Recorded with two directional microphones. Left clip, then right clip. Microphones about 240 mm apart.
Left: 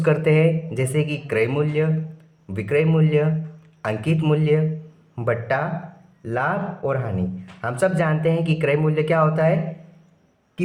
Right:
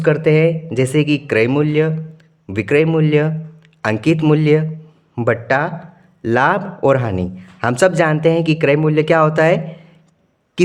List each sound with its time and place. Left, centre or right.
0.0 s speech: right